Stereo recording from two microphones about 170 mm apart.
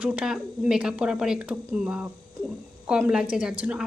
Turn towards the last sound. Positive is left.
turn(degrees=-5)  # may be behind; listen again after turning